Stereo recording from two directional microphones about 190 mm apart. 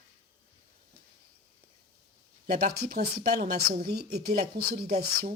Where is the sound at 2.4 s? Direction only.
50° right (ahead or behind).